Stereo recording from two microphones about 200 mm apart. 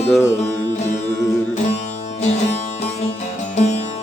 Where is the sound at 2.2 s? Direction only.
35° left (ahead or behind).